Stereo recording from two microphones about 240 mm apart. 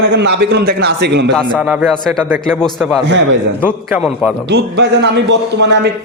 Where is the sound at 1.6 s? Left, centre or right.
Centre.